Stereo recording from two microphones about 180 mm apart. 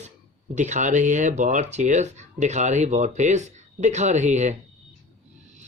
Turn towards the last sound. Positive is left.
turn(degrees=-40)  # may be behind; listen again after turning